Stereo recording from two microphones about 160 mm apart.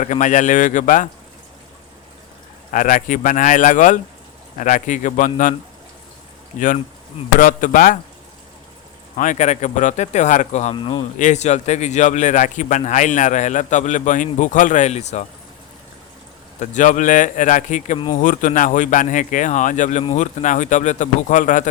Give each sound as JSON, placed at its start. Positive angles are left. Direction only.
{"t": 0.0, "sound": "a man's voice", "side_deg": 50}
{"t": 2.7, "sound": "a man's voice", "side_deg": 55}
{"t": 7.3, "sound": "speech", "side_deg": 55}
{"t": 9.1, "sound": "a man's voice", "side_deg": 55}
{"t": 10.8, "sound": "speech", "side_deg": 30}
{"t": 11.2, "sound": "a man's voice", "side_deg": 50}
{"t": 16.6, "sound": "a man's voice", "side_deg": 50}
{"t": 17.9, "sound": "speech", "side_deg": 30}
{"t": 18.2, "sound": "a man's voice", "side_deg": 55}